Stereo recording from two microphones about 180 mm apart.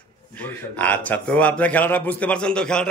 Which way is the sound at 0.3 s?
10° left (ahead or behind).